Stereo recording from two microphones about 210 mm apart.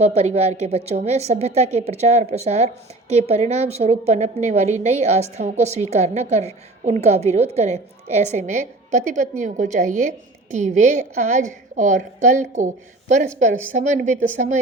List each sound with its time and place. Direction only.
0.0 s a woman's voice: 30° right (ahead or behind)